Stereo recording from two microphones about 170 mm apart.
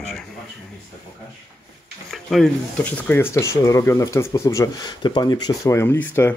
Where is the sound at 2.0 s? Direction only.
Centre (ahead or behind).